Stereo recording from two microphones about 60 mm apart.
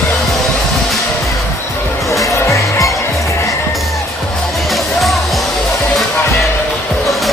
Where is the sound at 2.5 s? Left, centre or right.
Left.